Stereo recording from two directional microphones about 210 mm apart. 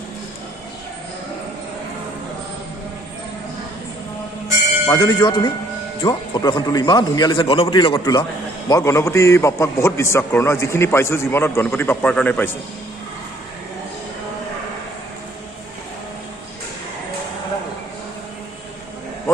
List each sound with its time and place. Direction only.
4.9 s a man's voice: 20° left (ahead or behind)